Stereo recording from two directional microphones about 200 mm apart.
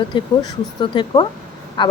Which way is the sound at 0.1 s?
25° left (ahead or behind).